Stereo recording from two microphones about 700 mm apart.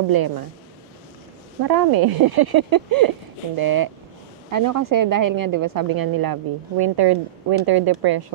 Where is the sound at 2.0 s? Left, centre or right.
Right.